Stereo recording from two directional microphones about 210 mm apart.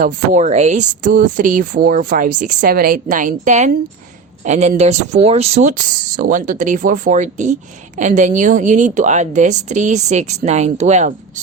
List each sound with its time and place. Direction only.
0.0 s speech: 35° right (ahead or behind)